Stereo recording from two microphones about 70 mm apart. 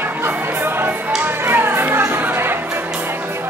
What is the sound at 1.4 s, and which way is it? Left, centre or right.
Music, right.